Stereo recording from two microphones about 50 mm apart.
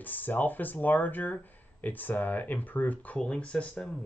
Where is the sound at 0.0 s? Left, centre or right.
Left.